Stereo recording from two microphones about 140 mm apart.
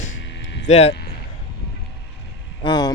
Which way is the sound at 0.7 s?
50° left (ahead or behind).